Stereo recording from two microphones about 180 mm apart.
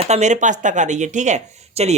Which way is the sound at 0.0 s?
40° right (ahead or behind).